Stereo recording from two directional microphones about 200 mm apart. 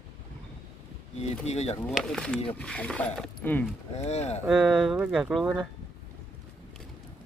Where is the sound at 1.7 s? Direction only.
5° left (ahead or behind).